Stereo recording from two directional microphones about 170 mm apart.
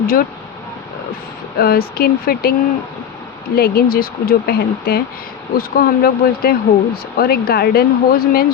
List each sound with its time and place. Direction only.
0.0 s speech: 60° left (ahead or behind)
1.5 s speech: 65° left (ahead or behind)